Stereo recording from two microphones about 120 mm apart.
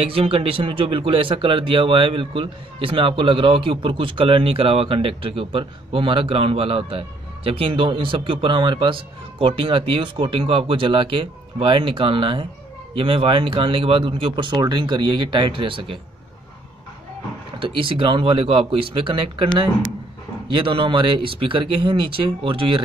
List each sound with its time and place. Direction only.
0.0 s speech: 50° right (ahead or behind)
17.6 s speech: 45° right (ahead or behind)